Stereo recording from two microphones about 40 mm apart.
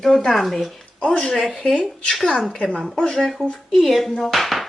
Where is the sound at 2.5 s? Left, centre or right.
Left.